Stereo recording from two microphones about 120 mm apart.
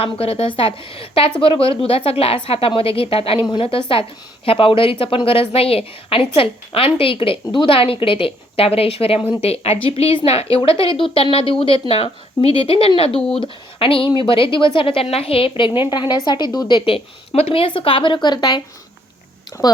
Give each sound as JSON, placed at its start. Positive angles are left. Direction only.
{"t": 0.0, "sound": "a woman's voice", "side_deg": 55}
{"t": 13.1, "sound": "speech", "side_deg": 5}
{"t": 13.4, "sound": "a woman's voice", "side_deg": 50}